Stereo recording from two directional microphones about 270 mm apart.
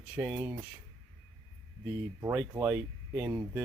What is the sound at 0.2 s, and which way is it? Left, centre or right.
Speech, centre.